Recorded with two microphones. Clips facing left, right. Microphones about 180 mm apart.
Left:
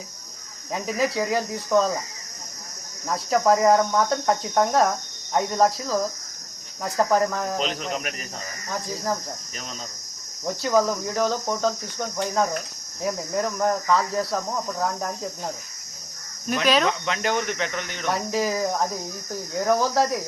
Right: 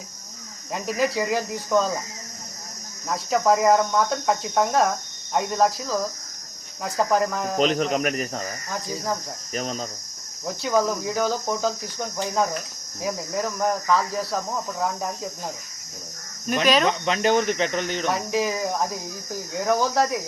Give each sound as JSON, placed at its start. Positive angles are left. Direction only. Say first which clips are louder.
{"t": 0.7, "sound": "speech", "louder": "even", "side_deg": 0}
{"t": 3.1, "sound": "speech", "louder": "left 1 dB", "side_deg": 0}
{"t": 7.8, "sound": "speech", "louder": "right 7 dB", "side_deg": -45}
{"t": 8.7, "sound": "speech", "louder": "left 1 dB", "side_deg": 0}
{"t": 9.6, "sound": "speech", "louder": "right 9 dB", "side_deg": -40}
{"t": 10.4, "sound": "speech", "louder": "left 1 dB", "side_deg": 0}
{"t": 16.6, "sound": "cricket", "louder": "right 1 dB", "side_deg": -10}
{"t": 17.1, "sound": "speech", "louder": "right 5 dB", "side_deg": -25}
{"t": 18.1, "sound": "speech", "louder": "left 3 dB", "side_deg": 0}